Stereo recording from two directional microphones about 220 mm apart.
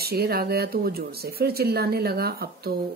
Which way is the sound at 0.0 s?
45° right (ahead or behind).